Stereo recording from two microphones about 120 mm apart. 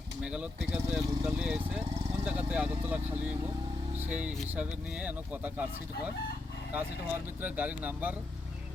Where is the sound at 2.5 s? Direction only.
15° right (ahead or behind).